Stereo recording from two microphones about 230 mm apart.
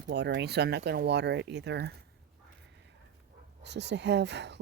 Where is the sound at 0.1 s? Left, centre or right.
Right.